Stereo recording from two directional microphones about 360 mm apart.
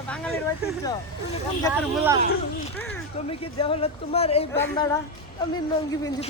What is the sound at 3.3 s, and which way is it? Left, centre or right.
Speech, centre.